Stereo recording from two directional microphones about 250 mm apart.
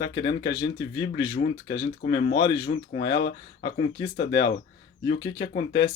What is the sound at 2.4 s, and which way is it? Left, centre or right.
Speech, centre.